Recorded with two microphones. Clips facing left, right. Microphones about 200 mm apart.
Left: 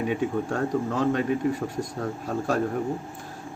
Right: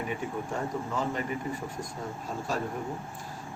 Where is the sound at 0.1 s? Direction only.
85° left.